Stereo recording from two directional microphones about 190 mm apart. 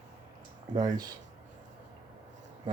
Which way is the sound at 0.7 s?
20° right (ahead or behind).